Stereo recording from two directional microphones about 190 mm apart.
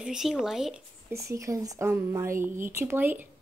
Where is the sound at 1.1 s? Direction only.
15° right (ahead or behind).